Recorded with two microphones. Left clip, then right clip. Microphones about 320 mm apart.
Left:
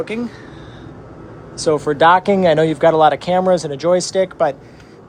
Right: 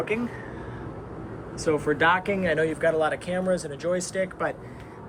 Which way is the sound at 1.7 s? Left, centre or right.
Centre.